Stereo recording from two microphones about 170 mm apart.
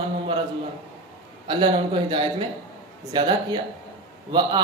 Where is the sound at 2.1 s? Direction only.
30° right (ahead or behind).